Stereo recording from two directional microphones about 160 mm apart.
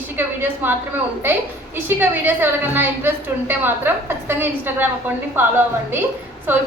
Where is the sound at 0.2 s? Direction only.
15° right (ahead or behind).